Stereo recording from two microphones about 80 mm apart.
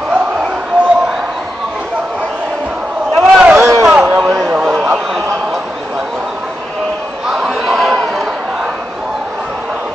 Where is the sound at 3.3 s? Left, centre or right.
Centre.